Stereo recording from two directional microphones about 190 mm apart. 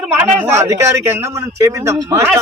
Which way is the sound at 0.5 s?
15° right (ahead or behind).